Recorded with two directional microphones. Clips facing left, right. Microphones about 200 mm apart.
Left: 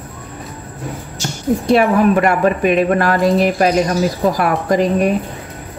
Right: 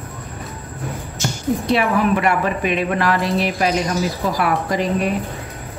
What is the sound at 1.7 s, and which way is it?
Speech, 45° left (ahead or behind).